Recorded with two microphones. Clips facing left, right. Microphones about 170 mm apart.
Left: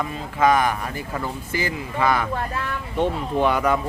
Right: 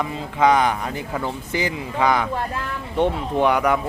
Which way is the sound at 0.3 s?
20° right (ahead or behind).